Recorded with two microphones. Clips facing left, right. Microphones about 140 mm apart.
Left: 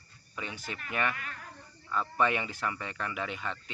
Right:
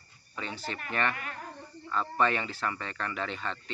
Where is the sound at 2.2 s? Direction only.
15° left (ahead or behind).